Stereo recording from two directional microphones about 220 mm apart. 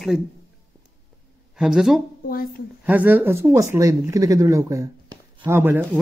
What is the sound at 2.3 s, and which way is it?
Speech, 40° left (ahead or behind).